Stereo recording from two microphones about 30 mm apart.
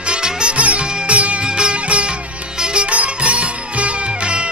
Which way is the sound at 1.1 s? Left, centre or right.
Right.